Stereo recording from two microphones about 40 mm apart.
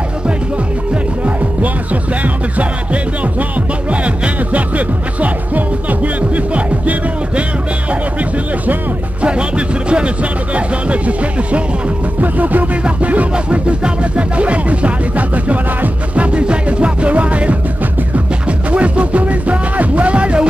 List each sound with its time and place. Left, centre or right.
3.9 s music: right
12.2 s music: right
18.7 s music: right